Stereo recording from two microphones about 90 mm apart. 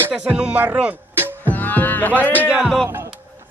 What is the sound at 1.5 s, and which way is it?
Music, 20° left (ahead or behind).